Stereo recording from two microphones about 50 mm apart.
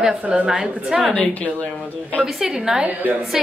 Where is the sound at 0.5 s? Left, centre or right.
Centre.